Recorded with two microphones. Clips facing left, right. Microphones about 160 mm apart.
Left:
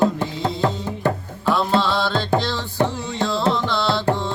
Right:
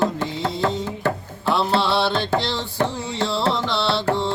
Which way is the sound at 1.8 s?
20° right (ahead or behind).